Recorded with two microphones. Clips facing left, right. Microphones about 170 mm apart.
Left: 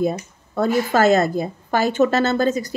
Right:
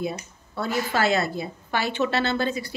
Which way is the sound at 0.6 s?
45° left (ahead or behind).